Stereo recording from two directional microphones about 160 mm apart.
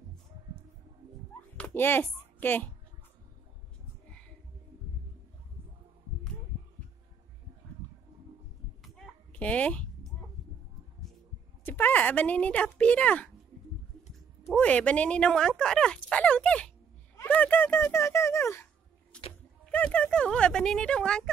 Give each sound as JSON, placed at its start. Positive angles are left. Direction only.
{"t": 1.6, "sound": "speech", "side_deg": 15}
{"t": 8.8, "sound": "a sound", "side_deg": 5}
{"t": 11.6, "sound": "speech", "side_deg": 10}
{"t": 14.5, "sound": "speech", "side_deg": 10}
{"t": 19.1, "sound": "a sound", "side_deg": 5}
{"t": 19.7, "sound": "speech", "side_deg": 10}